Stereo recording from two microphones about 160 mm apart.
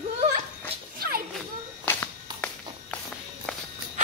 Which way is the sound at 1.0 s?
70° right (ahead or behind).